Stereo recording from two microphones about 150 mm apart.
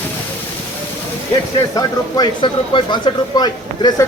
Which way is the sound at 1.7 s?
30° left (ahead or behind).